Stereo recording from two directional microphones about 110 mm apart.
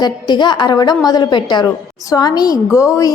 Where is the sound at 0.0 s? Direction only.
40° left (ahead or behind).